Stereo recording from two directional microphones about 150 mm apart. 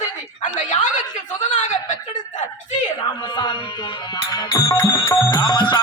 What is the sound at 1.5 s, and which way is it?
Chuckle, 55° left (ahead or behind).